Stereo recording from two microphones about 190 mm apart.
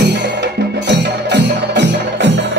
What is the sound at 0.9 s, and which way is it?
Music, 65° right (ahead or behind).